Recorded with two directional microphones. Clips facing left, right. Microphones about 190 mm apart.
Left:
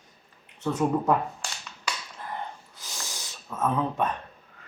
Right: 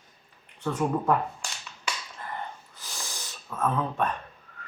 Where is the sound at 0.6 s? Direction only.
10° left (ahead or behind).